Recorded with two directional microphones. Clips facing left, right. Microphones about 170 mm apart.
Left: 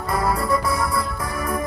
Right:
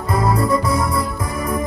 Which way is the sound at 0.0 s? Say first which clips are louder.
Right 4 dB; 20° right (ahead or behind).